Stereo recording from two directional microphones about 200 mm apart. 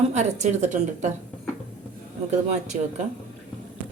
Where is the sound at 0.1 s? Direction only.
35° right (ahead or behind).